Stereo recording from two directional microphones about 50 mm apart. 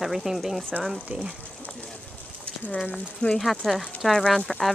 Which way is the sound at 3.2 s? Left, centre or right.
Centre.